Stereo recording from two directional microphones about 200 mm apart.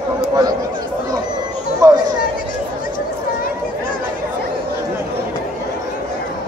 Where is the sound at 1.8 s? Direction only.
15° right (ahead or behind).